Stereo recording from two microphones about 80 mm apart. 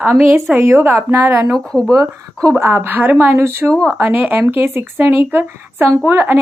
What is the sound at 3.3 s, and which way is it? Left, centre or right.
Speech, right.